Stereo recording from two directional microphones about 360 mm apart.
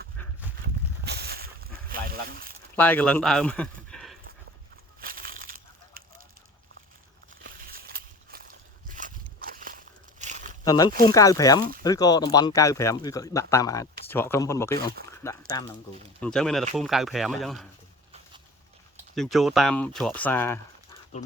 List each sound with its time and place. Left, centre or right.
0.2 s livestock: centre
1.0 s a sound: right
2.7 s speech: centre
4.9 s crushing: right
7.4 s a sound: right
10.6 s speech: centre
15.1 s a sound: centre
16.2 s speech: centre
19.1 s speech: centre